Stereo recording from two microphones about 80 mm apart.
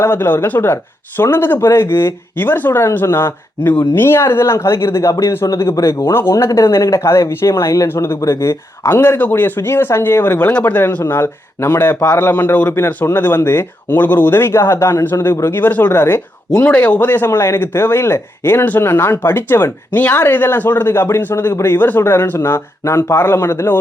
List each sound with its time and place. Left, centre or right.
0.0 s speech: left
6.3 s speech: left
9.0 s speech: left
11.1 s speech: left
16.5 s speech: centre; by 23.7 s left